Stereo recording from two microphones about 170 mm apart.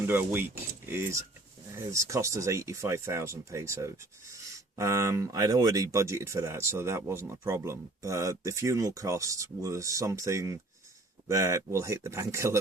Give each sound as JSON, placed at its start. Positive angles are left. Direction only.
{"t": 0.1, "sound": "speech", "side_deg": -10}